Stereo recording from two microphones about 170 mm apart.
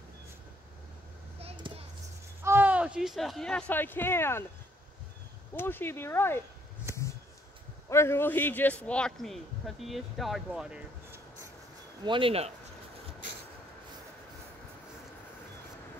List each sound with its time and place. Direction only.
2.4 s speech: 10° right (ahead or behind); by 4.5 s 15° left (ahead or behind)
5.5 s speech: 15° left (ahead or behind)
7.9 s a man's voice: 15° left (ahead or behind); by 11.1 s 5° right (ahead or behind)
12.0 s speech: 30° right (ahead or behind)